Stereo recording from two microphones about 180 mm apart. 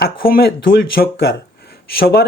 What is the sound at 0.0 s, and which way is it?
Speech, 60° left (ahead or behind).